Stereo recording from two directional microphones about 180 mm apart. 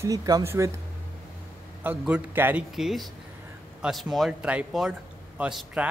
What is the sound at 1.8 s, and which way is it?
A man's voice, 10° right (ahead or behind).